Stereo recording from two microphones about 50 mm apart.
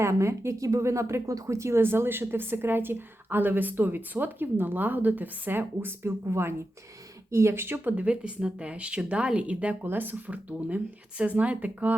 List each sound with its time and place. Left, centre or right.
0.0 s speech: right
7.3 s speech: right
8.0 s speech: right
9.8 s speech: right